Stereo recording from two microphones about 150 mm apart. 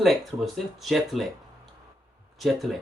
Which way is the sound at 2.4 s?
Centre (ahead or behind).